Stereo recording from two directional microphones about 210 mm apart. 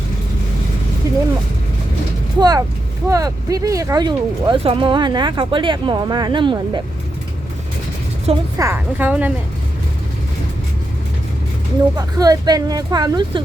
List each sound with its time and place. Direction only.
1.0 s a sound: 15° right (ahead or behind)
2.4 s speech: 15° right (ahead or behind)
8.5 s speech: 10° right (ahead or behind)
11.9 s speech: 15° right (ahead or behind)